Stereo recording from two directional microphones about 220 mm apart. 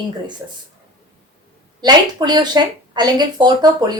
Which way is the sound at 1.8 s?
20° right (ahead or behind).